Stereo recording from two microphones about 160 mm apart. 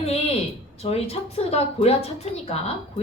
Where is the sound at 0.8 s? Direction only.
40° left (ahead or behind).